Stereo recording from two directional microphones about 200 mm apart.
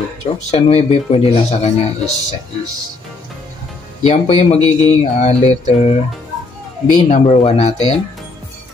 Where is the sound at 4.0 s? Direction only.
30° left (ahead or behind).